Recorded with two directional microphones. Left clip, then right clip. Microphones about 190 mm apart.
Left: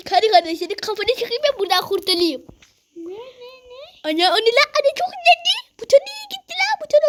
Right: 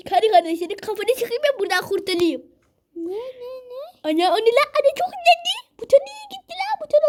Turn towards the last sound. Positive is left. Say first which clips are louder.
# left 3 dB
turn(degrees=10)  # may be behind; listen again after turning